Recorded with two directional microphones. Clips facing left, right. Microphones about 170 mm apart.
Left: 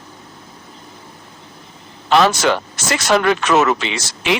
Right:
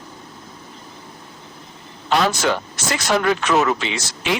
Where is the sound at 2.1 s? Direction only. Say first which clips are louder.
Left 4 dB; 85° left.